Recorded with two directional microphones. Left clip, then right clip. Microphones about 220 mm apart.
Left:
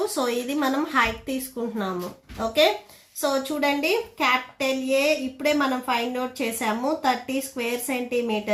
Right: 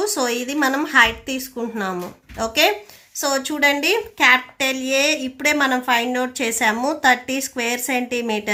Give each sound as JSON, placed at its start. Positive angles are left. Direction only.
{"t": 0.2, "sound": "a woman's voice", "side_deg": -35}